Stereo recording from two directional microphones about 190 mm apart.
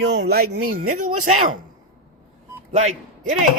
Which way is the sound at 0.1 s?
60° right (ahead or behind).